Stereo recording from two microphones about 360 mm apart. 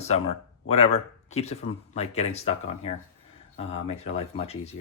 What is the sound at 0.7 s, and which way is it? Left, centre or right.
Speech, centre.